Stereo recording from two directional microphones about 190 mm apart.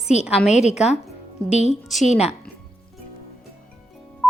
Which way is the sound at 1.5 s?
35° left (ahead or behind).